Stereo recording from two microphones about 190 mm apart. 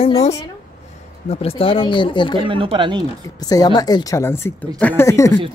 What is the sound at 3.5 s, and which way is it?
Speech, 20° left (ahead or behind).